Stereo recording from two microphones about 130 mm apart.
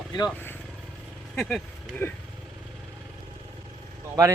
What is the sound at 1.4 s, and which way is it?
Speech, 5° left (ahead or behind).